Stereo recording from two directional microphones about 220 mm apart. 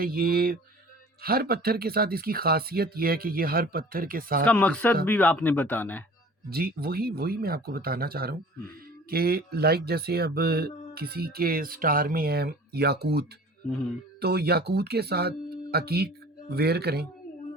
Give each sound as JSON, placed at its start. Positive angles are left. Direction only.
{"t": 0.0, "sound": "speech", "side_deg": -45}
{"t": 4.4, "sound": "speech", "side_deg": 5}
{"t": 6.5, "sound": "speech", "side_deg": -45}